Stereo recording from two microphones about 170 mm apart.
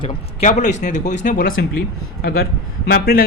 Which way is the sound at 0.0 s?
35° left (ahead or behind).